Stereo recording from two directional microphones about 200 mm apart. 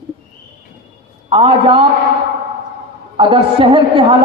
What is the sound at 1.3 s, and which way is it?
Speech, 25° right (ahead or behind).